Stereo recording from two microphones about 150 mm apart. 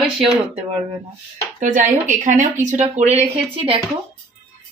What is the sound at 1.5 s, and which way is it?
Speech, 55° right (ahead or behind).